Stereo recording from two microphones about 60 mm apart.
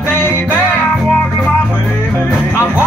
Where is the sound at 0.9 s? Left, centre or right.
Centre.